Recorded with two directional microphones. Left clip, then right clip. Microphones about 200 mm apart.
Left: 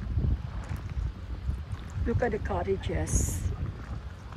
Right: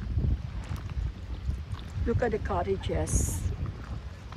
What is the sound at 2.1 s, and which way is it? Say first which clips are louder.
Speech: right 1 dB; centre (ahead or behind).